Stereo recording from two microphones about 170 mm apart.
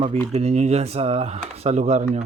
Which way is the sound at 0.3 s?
40° right (ahead or behind).